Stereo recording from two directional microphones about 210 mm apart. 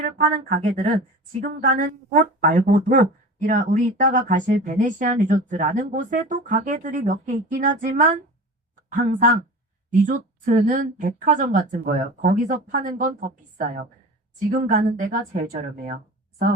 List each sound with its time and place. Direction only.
0.0 s speech: 35° right (ahead or behind)